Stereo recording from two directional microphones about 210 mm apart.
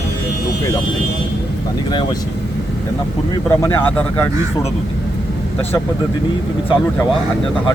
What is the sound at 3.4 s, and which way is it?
Speech, 10° left (ahead or behind).